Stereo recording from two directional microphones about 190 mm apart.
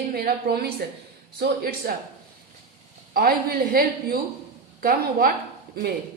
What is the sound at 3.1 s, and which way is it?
A woman's voice, 50° right (ahead or behind).